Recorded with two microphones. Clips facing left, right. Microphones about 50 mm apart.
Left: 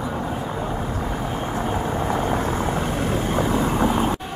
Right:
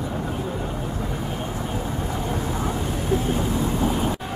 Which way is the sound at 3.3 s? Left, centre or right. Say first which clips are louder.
Left 3 dB; left.